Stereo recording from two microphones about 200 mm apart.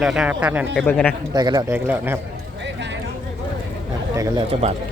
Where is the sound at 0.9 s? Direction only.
10° left (ahead or behind).